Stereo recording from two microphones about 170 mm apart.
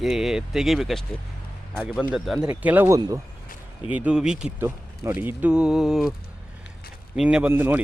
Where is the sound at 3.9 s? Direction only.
5° right (ahead or behind).